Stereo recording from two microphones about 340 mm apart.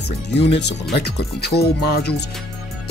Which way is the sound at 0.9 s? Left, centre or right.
Left.